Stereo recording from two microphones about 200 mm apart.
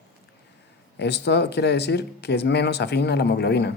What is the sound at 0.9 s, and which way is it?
Speech, 55° left (ahead or behind).